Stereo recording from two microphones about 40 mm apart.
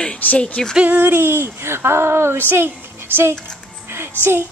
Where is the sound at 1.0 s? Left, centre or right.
Right.